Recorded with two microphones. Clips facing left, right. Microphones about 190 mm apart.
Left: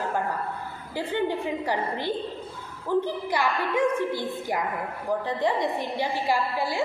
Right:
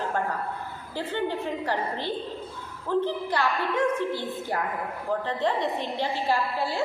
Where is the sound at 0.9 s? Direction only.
15° left (ahead or behind).